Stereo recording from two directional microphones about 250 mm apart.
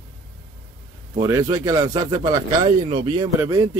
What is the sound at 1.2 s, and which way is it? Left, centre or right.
Speech, centre.